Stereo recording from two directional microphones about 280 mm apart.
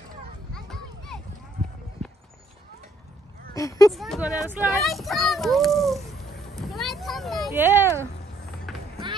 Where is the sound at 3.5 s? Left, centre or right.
Centre.